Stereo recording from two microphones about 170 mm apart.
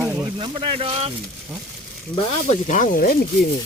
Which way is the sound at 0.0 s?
10° right (ahead or behind).